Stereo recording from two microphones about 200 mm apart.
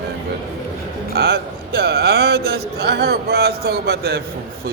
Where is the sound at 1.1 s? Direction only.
55° right (ahead or behind).